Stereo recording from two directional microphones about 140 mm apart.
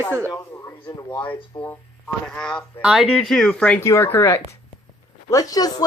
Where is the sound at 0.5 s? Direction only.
20° left (ahead or behind).